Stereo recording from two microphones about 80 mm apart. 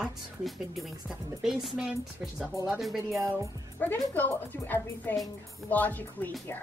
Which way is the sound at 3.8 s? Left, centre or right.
Centre.